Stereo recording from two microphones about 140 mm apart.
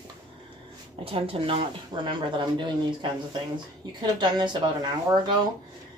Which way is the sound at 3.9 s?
30° right (ahead or behind).